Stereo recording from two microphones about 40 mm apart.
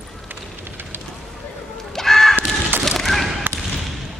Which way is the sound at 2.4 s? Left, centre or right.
Right.